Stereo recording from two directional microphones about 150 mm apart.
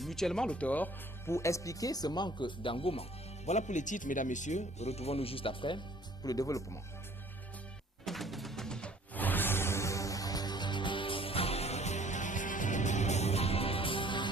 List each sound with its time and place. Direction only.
0.0 s speech: centre (ahead or behind); by 5.8 s 35° left (ahead or behind)
6.2 s speech: 25° left (ahead or behind)
8.0 s music: centre (ahead or behind); by 14.3 s 35° left (ahead or behind)